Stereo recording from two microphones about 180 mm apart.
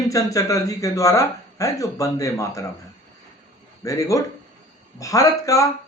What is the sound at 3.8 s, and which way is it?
Speech, 20° left (ahead or behind).